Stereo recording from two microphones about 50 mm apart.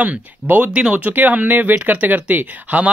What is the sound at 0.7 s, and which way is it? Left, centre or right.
Speech, right.